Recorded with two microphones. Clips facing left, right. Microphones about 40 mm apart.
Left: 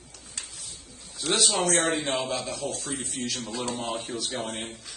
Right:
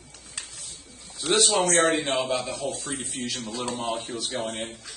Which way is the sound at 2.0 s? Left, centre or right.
Centre.